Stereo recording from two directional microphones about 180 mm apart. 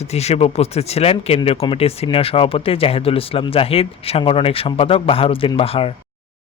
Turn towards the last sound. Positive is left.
turn(degrees=30)  # may be behind; listen again after turning